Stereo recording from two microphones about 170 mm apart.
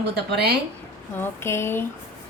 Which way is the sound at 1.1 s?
15° left (ahead or behind).